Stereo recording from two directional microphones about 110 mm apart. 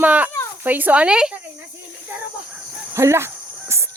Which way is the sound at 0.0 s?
15° right (ahead or behind).